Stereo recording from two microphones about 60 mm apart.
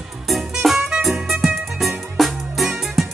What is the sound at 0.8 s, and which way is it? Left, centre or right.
Music, centre.